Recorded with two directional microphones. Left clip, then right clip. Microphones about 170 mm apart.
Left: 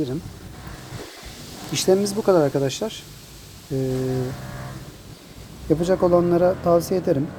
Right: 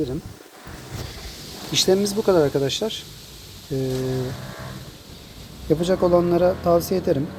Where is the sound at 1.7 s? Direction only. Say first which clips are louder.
Right 1 dB; 10° left (ahead or behind).